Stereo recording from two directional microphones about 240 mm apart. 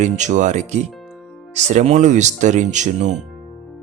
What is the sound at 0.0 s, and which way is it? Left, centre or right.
Speech, right.